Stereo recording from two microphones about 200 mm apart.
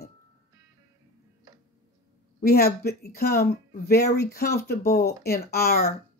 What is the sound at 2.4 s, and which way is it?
Speech, 50° left (ahead or behind).